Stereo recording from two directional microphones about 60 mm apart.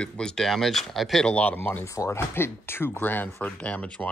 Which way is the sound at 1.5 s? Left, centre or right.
Left.